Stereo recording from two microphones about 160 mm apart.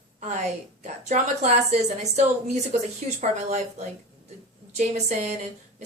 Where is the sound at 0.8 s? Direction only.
45° right (ahead or behind).